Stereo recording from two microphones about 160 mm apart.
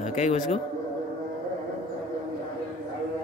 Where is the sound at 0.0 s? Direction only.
45° left (ahead or behind).